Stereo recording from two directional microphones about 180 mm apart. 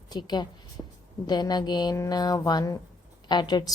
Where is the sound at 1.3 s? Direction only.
20° left (ahead or behind).